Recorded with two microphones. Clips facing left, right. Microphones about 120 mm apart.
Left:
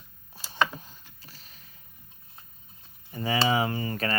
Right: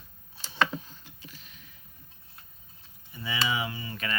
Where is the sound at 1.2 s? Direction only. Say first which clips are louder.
Right 3 dB; 40° left (ahead or behind).